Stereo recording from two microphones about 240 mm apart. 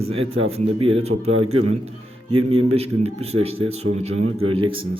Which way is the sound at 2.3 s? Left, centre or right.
Right.